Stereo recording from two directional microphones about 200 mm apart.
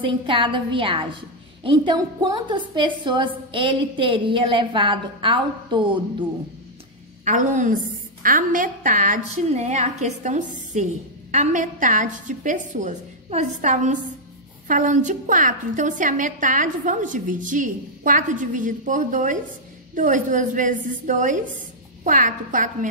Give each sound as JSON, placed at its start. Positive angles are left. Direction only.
{"t": 0.0, "sound": "a woman's voice", "side_deg": -25}
{"t": 7.2, "sound": "a woman's voice", "side_deg": -40}